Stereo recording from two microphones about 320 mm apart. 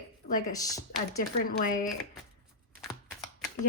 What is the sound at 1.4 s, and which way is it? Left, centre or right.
Speech, left.